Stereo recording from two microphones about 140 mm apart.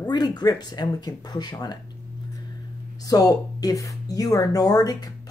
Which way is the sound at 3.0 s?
25° left (ahead or behind).